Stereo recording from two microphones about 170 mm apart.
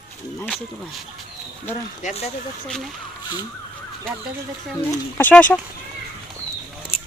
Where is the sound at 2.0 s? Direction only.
45° left (ahead or behind).